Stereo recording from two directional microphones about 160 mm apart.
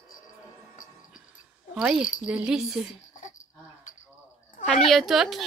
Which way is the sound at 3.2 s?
50° left (ahead or behind).